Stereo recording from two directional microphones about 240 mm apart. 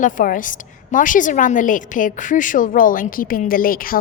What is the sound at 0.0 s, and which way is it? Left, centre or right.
A woman's voice, left.